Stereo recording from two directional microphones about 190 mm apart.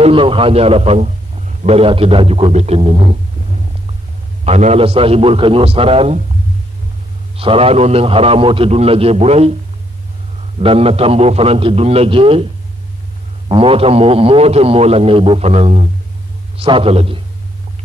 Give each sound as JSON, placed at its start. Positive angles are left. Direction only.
{"t": 0.0, "sound": "a man's voice", "side_deg": -30}
{"t": 7.3, "sound": "a man's voice", "side_deg": -30}
{"t": 10.6, "sound": "a man's voice", "side_deg": -30}
{"t": 13.5, "sound": "a man's voice", "side_deg": -30}